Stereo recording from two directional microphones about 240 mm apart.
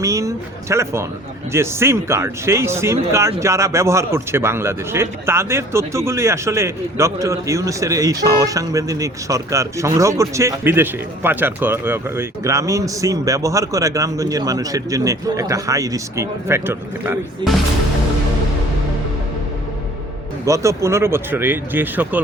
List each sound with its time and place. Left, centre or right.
0.0 s a sound: centre
1.5 s speech: centre
20.4 s speech: centre